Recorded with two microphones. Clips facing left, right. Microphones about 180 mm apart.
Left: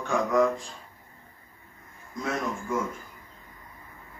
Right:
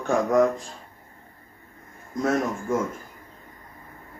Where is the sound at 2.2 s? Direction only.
45° right (ahead or behind).